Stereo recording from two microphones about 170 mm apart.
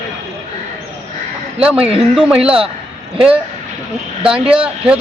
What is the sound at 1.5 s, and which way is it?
Speech, 5° right (ahead or behind).